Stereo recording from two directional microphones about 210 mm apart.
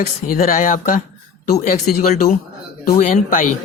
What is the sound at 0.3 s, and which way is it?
Speech, 40° left (ahead or behind).